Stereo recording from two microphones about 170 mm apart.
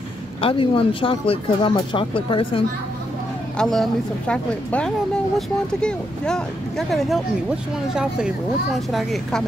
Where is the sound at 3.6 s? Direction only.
5° left (ahead or behind).